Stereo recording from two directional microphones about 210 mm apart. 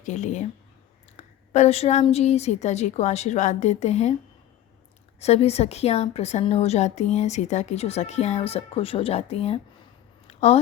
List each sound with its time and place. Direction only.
0.0 s a woman's voice: 35° left (ahead or behind)
5.2 s a woman's voice: 30° left (ahead or behind)
10.2 s a sound: 30° left (ahead or behind)